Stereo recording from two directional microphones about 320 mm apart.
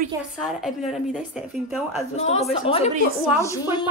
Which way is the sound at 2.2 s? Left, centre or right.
Centre.